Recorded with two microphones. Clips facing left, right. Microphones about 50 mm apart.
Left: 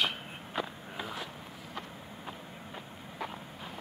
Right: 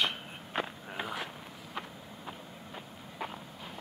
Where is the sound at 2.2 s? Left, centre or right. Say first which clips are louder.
Even; centre.